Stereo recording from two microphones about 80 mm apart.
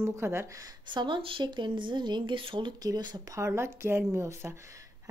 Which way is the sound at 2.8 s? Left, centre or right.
Right.